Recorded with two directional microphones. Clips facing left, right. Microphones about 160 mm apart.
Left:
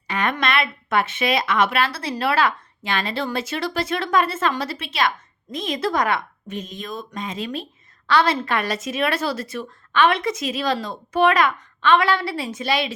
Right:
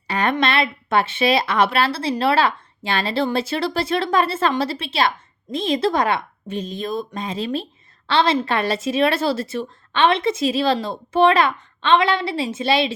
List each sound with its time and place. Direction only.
0.1 s a woman's voice: 35° right (ahead or behind)